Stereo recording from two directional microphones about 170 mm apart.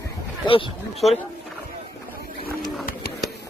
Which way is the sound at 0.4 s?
30° left (ahead or behind).